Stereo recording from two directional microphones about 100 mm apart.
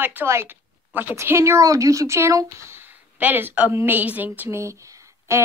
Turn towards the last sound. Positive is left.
turn(degrees=-30)  # may be behind; listen again after turning